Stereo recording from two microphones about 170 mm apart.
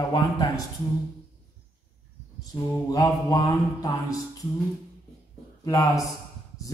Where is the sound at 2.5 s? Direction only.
20° left (ahead or behind).